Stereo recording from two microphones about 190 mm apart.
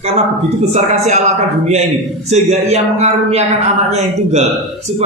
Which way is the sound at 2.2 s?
35° right (ahead or behind).